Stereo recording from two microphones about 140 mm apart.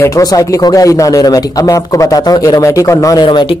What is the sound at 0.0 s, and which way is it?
Speech, 25° left (ahead or behind).